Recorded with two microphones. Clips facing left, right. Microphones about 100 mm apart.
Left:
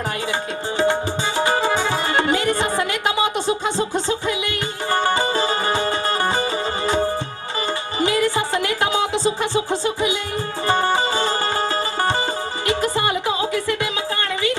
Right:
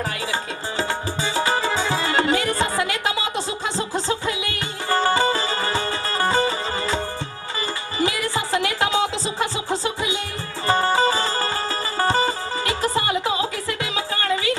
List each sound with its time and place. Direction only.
1.6 s music: 55° left (ahead or behind)
2.3 s music: 25° left (ahead or behind)
4.9 s music: 25° left (ahead or behind)
10.7 s music: 20° left (ahead or behind)